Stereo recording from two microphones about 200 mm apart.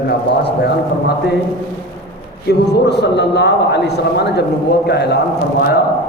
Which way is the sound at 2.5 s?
55° left (ahead or behind).